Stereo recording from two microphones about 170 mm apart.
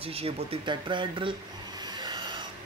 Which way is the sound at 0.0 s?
35° right (ahead or behind).